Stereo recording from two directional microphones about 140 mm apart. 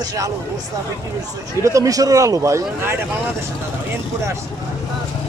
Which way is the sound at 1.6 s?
25° right (ahead or behind).